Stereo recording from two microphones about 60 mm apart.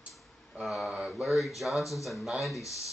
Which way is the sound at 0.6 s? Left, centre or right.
Centre.